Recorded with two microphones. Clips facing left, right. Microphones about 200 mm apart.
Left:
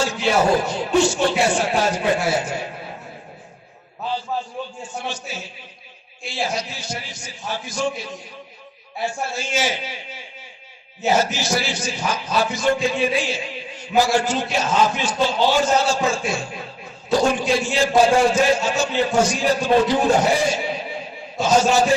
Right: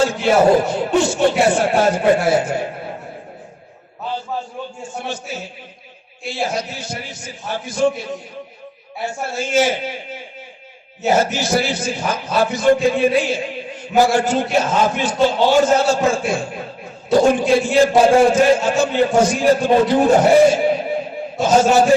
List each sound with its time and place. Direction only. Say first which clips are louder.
0.0 s a man's voice: right 5 dB; 55° right (ahead or behind)
4.9 s a man's voice: right 3 dB; 55° right (ahead or behind)
9.4 s a man's voice: right 9 dB; 55° right (ahead or behind)